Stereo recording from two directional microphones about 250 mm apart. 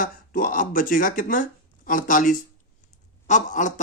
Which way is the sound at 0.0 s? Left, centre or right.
Left.